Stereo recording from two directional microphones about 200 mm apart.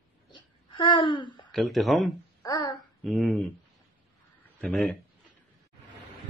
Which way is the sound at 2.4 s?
20° left (ahead or behind).